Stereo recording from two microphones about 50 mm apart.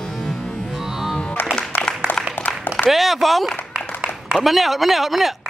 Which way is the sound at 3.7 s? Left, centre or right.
Centre.